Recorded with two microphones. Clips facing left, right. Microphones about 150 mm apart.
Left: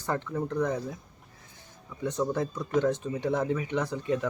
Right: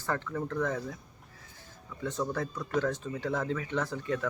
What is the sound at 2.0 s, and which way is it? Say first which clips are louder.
Speech: left 4 dB; 20° left (ahead or behind).